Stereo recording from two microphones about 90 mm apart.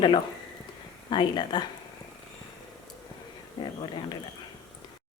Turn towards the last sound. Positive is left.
turn(degrees=55)  # may be behind; listen again after turning